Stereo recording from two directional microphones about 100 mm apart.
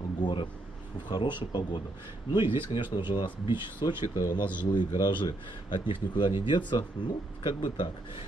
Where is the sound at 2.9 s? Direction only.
50° left (ahead or behind).